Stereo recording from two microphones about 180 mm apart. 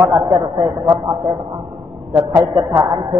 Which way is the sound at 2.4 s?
15° right (ahead or behind).